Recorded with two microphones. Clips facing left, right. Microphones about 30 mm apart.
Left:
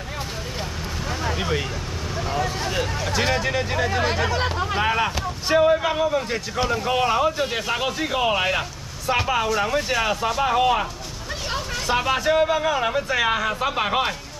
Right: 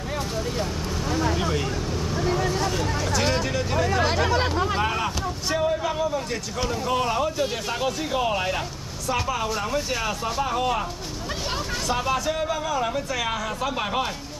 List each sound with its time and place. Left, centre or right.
1.0 s vehicle: centre
3.3 s speech: left